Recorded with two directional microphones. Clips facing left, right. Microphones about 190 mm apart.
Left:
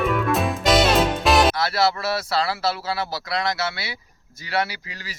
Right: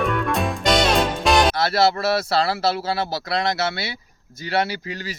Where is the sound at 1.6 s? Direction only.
25° right (ahead or behind).